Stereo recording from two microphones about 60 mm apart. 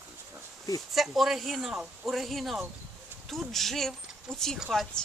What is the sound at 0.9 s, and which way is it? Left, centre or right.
Speech, centre.